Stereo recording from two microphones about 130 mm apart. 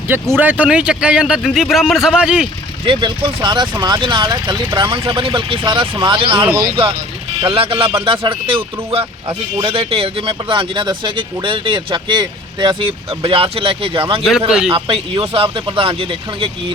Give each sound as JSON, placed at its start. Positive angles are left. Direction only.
{"t": 0.1, "sound": "speech", "side_deg": -15}
{"t": 2.8, "sound": "speech", "side_deg": -40}